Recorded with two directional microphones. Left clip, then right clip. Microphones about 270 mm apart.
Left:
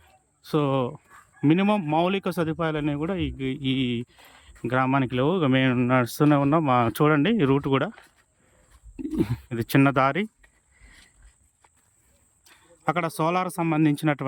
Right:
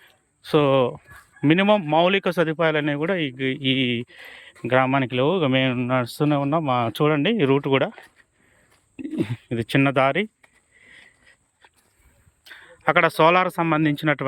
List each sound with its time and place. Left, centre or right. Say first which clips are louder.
0.0 s speech: right 7 dB; centre
9.2 s speech: right 3 dB; centre
10.8 s a sound: right 6 dB; centre
12.5 s speech: right 5 dB; centre